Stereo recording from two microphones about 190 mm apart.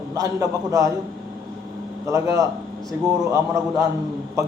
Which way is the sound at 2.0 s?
15° right (ahead or behind).